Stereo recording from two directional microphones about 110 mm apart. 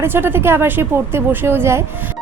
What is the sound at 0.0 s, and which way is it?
A woman's voice, 20° right (ahead or behind).